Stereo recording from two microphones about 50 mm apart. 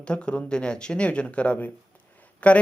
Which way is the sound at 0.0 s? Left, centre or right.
Centre.